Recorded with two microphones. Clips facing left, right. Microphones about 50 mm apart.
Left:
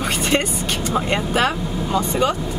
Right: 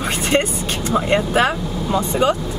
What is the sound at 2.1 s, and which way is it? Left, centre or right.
Speech, centre.